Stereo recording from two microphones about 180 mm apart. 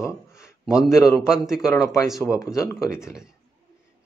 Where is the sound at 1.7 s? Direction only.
15° left (ahead or behind).